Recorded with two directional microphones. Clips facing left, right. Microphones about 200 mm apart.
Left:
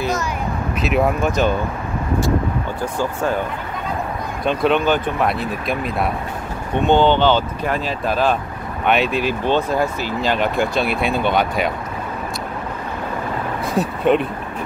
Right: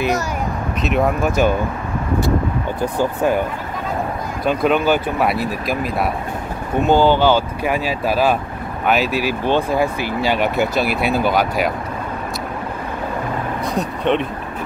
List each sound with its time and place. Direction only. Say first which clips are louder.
0.8 s speech: even; centre (ahead or behind)
3.0 s speech: right 3 dB; 15° right (ahead or behind)
4.5 s speech: right 1 dB; 5° right (ahead or behind)
13.7 s speech: left 3 dB; centre (ahead or behind)